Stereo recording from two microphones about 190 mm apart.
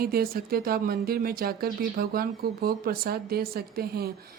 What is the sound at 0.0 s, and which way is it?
Speech, 50° right (ahead or behind).